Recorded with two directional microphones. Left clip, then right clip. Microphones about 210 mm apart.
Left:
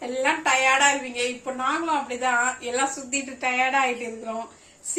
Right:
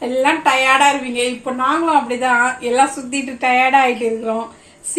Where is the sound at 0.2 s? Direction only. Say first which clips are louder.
Right 7 dB; 25° right (ahead or behind).